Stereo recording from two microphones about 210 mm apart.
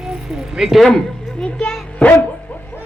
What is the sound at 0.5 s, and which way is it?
Speech, centre (ahead or behind).